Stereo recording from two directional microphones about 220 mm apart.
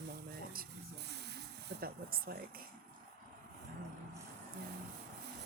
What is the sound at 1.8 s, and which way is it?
Speech, 45° right (ahead or behind).